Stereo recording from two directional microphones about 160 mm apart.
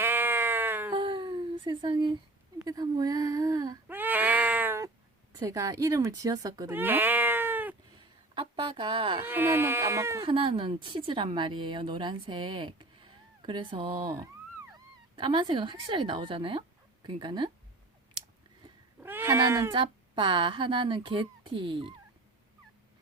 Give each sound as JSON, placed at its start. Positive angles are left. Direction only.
{"t": 0.0, "sound": "cat", "side_deg": -10}
{"t": 0.9, "sound": "a sound", "side_deg": -30}
{"t": 2.6, "sound": "speech", "side_deg": -25}
{"t": 3.8, "sound": "a sound", "side_deg": -10}
{"t": 5.4, "sound": "speech", "side_deg": -20}
{"t": 8.4, "sound": "speech", "side_deg": -35}
{"t": 9.2, "sound": "speech", "side_deg": -10}
{"t": 10.2, "sound": "a woman's voice", "side_deg": -35}
{"t": 18.9, "sound": "cat", "side_deg": -15}
{"t": 19.7, "sound": "a woman's voice", "side_deg": -30}